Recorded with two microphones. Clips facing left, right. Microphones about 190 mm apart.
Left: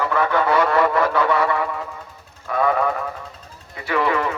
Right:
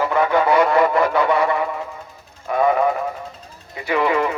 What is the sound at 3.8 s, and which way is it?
Speech, 15° right (ahead or behind).